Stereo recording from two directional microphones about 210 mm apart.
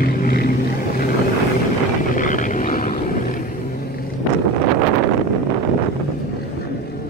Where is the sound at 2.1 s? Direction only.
40° left (ahead or behind).